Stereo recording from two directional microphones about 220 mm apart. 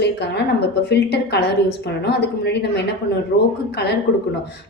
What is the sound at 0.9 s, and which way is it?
Speech, 50° left (ahead or behind).